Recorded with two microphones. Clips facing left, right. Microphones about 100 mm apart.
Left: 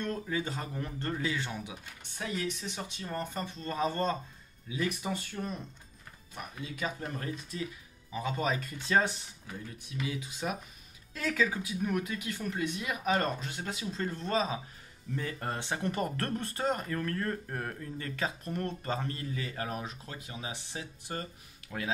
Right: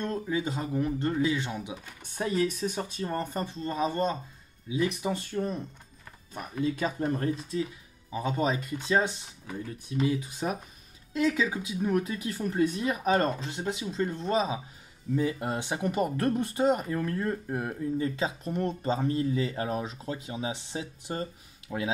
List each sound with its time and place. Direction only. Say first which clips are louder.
0.0 s speech: right 4 dB; 20° right (ahead or behind)
2.1 s speech: right 8 dB; 40° right (ahead or behind)
3.6 s speech: right 2 dB; 20° right (ahead or behind)
6.3 s speech: right 11 dB; 40° right (ahead or behind); by 9.2 s 20° right (ahead or behind)
9.9 s speech: right 9 dB; 35° right (ahead or behind)
11.1 s speech: right 4 dB; 20° right (ahead or behind)